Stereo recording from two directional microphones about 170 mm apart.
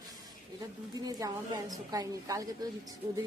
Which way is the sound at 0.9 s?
20° right (ahead or behind).